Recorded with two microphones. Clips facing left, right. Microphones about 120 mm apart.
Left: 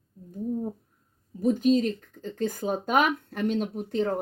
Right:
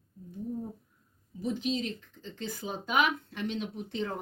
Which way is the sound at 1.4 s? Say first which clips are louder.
Left 10 dB; 45° left (ahead or behind).